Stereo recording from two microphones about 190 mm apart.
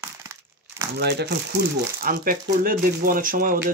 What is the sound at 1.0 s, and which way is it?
Speech, 60° right (ahead or behind).